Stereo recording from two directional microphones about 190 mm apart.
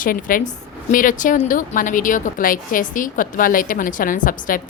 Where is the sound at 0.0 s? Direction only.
45° left (ahead or behind).